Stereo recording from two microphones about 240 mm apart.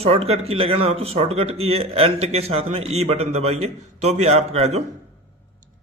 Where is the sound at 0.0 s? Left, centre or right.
Right.